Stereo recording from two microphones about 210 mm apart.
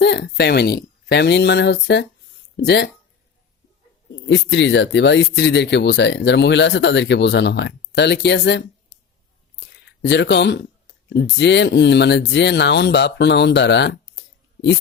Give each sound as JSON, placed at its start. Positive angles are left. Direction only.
{"t": 0.0, "sound": "speech", "side_deg": 50}
{"t": 4.3, "sound": "speech", "side_deg": 60}
{"t": 9.8, "sound": "speech", "side_deg": 55}